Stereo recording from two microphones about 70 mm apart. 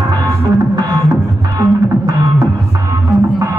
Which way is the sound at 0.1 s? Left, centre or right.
Right.